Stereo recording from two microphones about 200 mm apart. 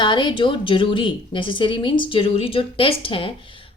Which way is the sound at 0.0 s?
25° left (ahead or behind).